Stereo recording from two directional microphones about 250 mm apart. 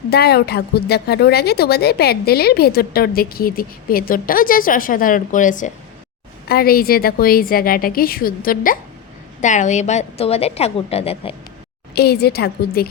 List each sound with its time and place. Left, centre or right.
0.1 s a woman's voice: left
11.9 s a woman's voice: left